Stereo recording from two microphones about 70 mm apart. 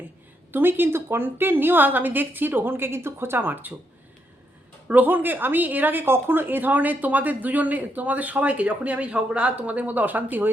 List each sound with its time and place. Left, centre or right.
0.5 s speech: right
4.9 s speech: right